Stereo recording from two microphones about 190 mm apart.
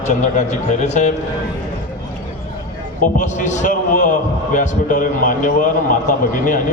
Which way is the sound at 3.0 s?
40° left (ahead or behind).